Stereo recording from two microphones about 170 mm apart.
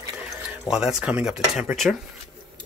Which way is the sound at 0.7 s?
5° right (ahead or behind).